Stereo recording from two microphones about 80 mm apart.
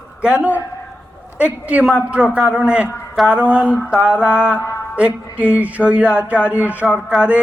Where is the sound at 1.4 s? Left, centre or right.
Centre.